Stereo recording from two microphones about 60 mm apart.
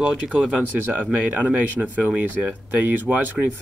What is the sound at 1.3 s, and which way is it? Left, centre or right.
Speech, right.